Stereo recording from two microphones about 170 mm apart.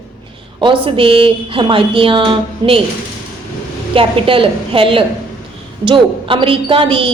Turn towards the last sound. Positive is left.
turn(degrees=-30)  # may be behind; listen again after turning